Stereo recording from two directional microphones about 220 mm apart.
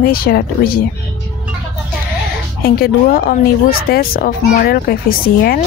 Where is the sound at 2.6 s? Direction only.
45° left (ahead or behind).